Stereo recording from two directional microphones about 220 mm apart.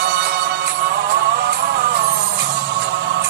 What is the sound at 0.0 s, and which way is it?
Music, 50° right (ahead or behind).